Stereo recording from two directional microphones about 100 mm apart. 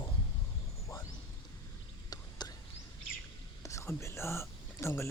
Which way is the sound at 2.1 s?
45° left (ahead or behind).